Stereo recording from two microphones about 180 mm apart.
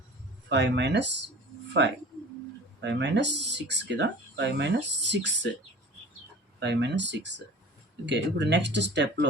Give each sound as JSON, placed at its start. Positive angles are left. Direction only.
{"t": 0.4, "sound": "speech", "side_deg": -75}
{"t": 6.6, "sound": "speech", "side_deg": -75}